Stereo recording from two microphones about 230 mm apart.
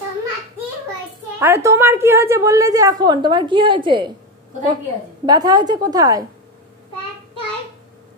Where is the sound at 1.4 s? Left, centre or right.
Centre.